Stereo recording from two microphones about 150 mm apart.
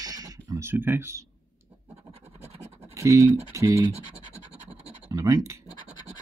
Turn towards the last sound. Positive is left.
turn(degrees=-25)  # may be behind; listen again after turning